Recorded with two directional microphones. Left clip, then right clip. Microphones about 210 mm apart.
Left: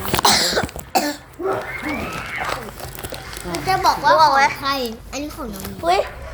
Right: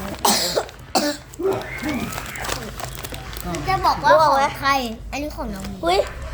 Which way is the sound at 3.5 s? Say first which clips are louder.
Left 2 dB; 30° right (ahead or behind).